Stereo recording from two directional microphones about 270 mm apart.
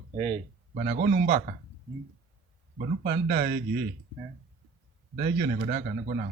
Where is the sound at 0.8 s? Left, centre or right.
Right.